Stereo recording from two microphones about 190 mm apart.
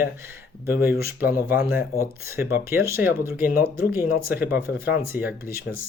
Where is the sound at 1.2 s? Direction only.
10° right (ahead or behind).